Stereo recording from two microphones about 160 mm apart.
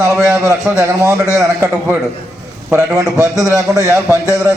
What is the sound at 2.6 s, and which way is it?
A man's voice, 15° right (ahead or behind).